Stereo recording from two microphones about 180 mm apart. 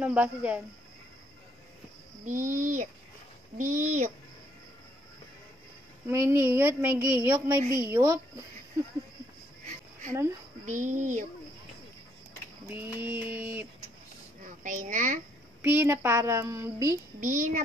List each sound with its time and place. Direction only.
0.0 s speech: 10° right (ahead or behind)
2.2 s a child's voice: 45° right (ahead or behind)
6.0 s speech: 15° right (ahead or behind)
10.6 s a child's voice: 45° right (ahead or behind)
12.7 s speech: 10° right (ahead or behind)
14.4 s a child's voice: 45° right (ahead or behind)
15.6 s speech: 10° right (ahead or behind)
17.2 s a child's voice: 45° right (ahead or behind)